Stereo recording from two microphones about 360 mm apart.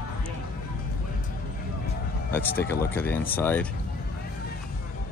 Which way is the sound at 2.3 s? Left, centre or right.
Centre.